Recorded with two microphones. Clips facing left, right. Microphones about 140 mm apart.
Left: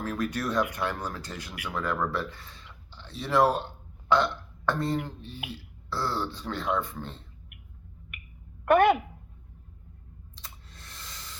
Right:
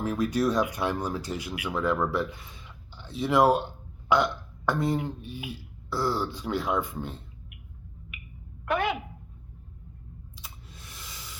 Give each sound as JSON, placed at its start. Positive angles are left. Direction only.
{"t": 0.0, "sound": "speech", "side_deg": -15}
{"t": 8.6, "sound": "a woman's voice", "side_deg": 55}
{"t": 10.3, "sound": "a sound", "side_deg": -5}